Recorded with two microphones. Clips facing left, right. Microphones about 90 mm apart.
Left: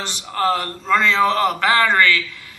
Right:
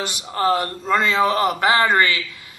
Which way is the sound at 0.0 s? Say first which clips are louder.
Even; 10° right (ahead or behind).